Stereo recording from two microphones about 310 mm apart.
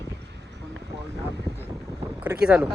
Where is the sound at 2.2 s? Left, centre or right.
Centre.